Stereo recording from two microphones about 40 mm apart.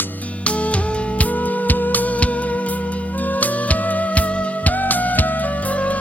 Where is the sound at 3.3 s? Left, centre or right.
Left.